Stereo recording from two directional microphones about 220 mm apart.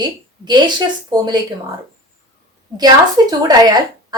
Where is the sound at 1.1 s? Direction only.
20° right (ahead or behind).